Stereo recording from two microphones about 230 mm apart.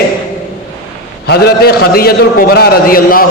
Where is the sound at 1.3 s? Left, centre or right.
Left.